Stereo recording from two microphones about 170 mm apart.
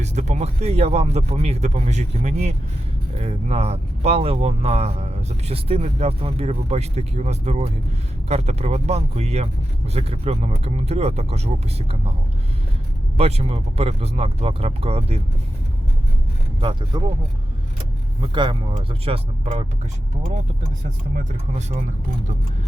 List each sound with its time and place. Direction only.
0.0 s speech: 40° right (ahead or behind)
13.1 s speech: 35° right (ahead or behind)
16.6 s speech: 30° right (ahead or behind)
18.2 s speech: 30° right (ahead or behind)